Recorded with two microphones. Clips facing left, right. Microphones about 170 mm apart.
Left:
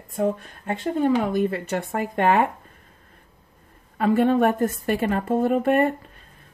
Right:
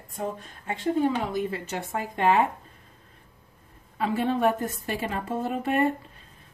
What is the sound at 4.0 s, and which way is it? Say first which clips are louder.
A woman's voice: left 6 dB; 55° left (ahead or behind).